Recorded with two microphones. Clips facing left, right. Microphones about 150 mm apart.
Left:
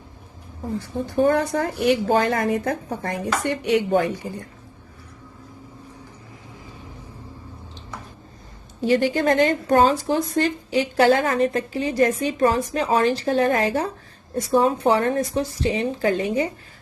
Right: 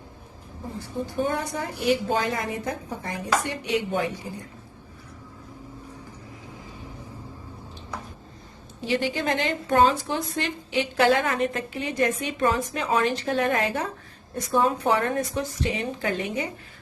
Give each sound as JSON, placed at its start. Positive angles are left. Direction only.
{"t": 1.2, "sound": "a woman's voice", "side_deg": 60}
{"t": 8.9, "sound": "a woman's voice", "side_deg": 45}